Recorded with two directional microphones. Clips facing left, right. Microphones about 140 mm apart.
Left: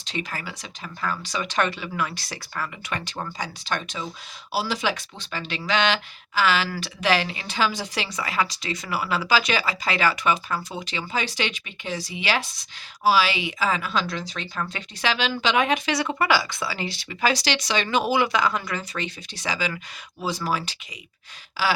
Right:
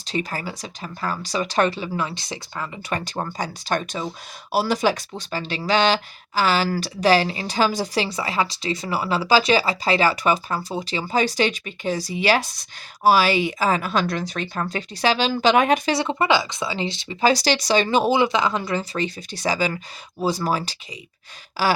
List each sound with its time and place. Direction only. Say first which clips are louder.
0.0 s speech: right 5 dB; 40° right (ahead or behind); by 2.6 s 20° right (ahead or behind)
2.9 s a woman's voice: right 7 dB; 40° right (ahead or behind)
16.0 s speech: right 2 dB; 25° right (ahead or behind); by 21.7 s 40° right (ahead or behind)